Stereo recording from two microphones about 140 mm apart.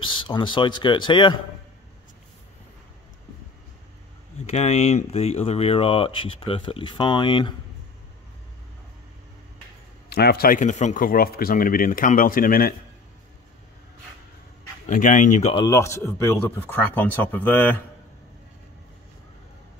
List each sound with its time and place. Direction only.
0.1 s speech: 35° left (ahead or behind)
4.5 s speech: 50° left (ahead or behind); by 7.5 s 35° left (ahead or behind)
10.0 s speech: 90° left
14.9 s speech: 65° left (ahead or behind)
15.5 s speech: 25° left (ahead or behind)